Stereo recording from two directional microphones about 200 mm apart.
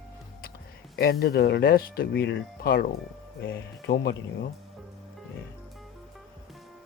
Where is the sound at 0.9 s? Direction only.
50° left (ahead or behind).